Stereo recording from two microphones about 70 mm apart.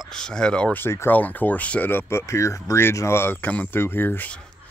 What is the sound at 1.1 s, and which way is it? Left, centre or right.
Speech, left.